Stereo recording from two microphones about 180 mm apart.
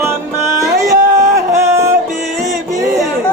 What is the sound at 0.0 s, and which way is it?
Music, 15° right (ahead or behind).